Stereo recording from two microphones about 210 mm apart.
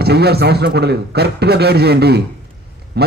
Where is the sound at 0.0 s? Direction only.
50° right (ahead or behind).